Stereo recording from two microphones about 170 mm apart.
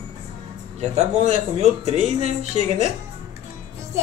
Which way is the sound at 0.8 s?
40° right (ahead or behind).